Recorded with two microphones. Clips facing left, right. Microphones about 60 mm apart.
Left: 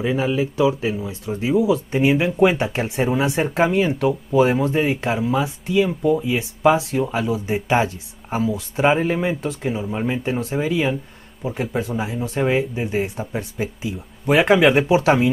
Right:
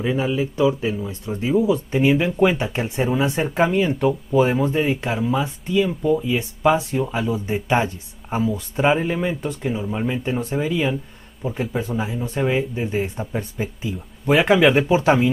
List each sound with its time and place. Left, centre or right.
0.0 s speech: centre
4.7 s speech: centre
5.1 s speech: centre